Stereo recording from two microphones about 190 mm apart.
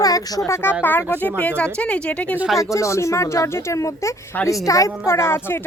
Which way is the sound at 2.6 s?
15° left (ahead or behind).